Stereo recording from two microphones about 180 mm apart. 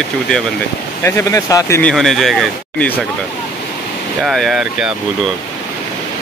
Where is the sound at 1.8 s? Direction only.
Centre (ahead or behind).